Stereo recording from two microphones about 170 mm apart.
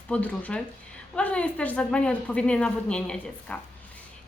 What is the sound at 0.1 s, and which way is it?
A woman's voice, 10° left (ahead or behind).